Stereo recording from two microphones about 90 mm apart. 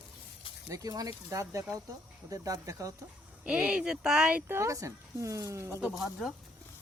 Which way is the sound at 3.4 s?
10° right (ahead or behind).